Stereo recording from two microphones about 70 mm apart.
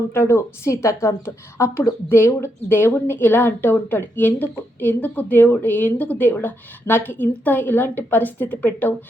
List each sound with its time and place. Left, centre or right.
0.1 s a woman's voice: left